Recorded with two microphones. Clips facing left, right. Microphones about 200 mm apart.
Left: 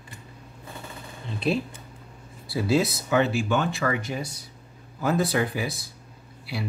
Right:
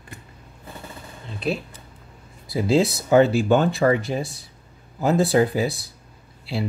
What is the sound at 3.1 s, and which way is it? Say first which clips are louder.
Speech: right 8 dB; 40° right (ahead or behind).